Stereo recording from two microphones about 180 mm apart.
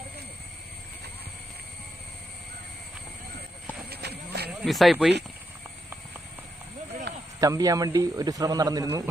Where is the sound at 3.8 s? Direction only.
65° right (ahead or behind).